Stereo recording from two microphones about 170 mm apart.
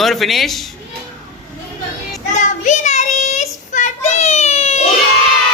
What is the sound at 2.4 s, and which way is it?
Child singing, 45° left (ahead or behind).